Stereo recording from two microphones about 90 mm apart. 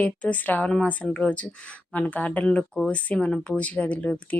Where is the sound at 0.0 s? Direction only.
15° left (ahead or behind).